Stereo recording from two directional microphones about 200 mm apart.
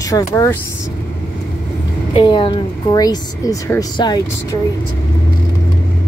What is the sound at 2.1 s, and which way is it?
Speech, 25° left (ahead or behind).